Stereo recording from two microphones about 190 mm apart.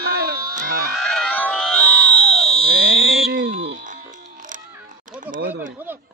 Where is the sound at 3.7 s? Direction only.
45° right (ahead or behind).